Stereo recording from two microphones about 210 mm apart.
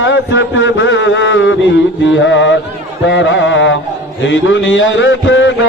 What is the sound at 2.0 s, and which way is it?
A man's voice, 60° left (ahead or behind).